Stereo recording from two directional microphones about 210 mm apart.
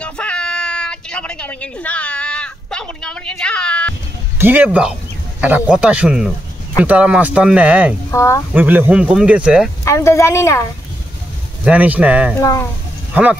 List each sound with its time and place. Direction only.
0.0 s a sound: 5° left (ahead or behind)
4.4 s speech: 10° right (ahead or behind)
8.1 s speech: 15° left (ahead or behind)
8.5 s speech: 10° right (ahead or behind)
9.8 s a woman's voice: 15° left (ahead or behind)
11.6 s speech: 5° right (ahead or behind)
12.4 s a woman's voice: 15° left (ahead or behind)
13.1 s speech: 5° right (ahead or behind)